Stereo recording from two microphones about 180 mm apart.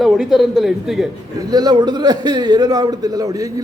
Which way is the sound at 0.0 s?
Centre (ahead or behind).